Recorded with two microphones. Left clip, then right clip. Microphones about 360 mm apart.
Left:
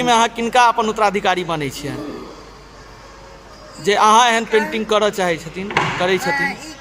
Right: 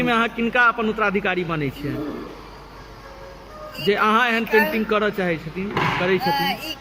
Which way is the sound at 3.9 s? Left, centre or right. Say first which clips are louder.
Left 6 dB; centre.